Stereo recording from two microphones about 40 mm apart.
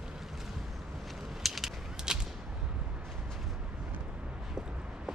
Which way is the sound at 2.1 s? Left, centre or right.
Centre.